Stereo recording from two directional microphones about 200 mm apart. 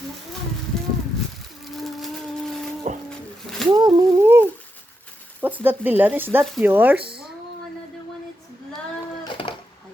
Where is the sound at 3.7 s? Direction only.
20° right (ahead or behind).